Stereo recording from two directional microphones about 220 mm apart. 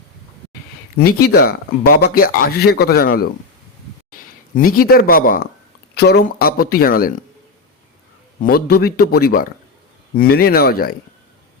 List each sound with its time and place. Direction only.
0.9 s speech: 45° left (ahead or behind)
8.4 s speech: 40° left (ahead or behind)